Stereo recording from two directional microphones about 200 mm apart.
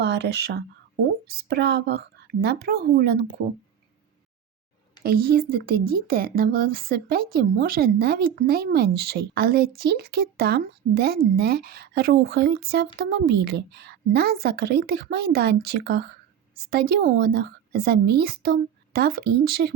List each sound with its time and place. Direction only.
0.0 s speech: 55° right (ahead or behind)
5.0 s speech: 50° right (ahead or behind)